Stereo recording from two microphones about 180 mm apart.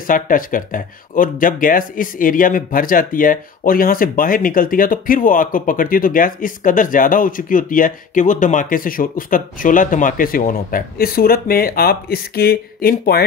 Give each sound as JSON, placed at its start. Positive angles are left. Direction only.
{"t": 0.0, "sound": "speech", "side_deg": 50}